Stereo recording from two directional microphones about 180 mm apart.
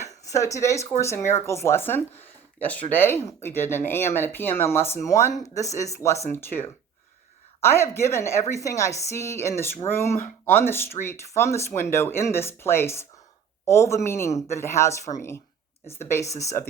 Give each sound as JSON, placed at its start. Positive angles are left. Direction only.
{"t": 0.3, "sound": "speech", "side_deg": 15}